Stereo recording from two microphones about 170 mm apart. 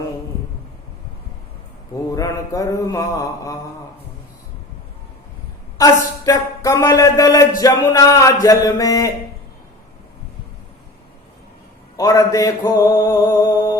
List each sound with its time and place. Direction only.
2.1 s mantra: 20° left (ahead or behind)
5.7 s speech: 20° left (ahead or behind)
7.6 s mantra: 20° left (ahead or behind)
11.9 s mantra: 20° left (ahead or behind)